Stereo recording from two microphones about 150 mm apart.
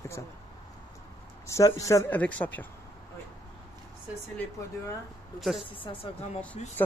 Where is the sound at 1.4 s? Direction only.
20° left (ahead or behind).